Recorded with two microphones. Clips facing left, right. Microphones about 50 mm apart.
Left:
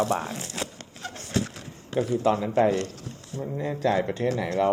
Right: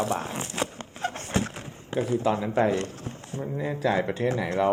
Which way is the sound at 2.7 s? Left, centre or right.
Right.